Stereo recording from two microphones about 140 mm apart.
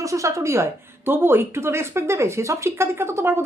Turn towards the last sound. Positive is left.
turn(degrees=-20)  # may be behind; listen again after turning